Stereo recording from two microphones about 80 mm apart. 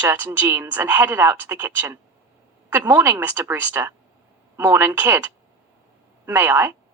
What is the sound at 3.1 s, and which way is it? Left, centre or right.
A woman's voice, right.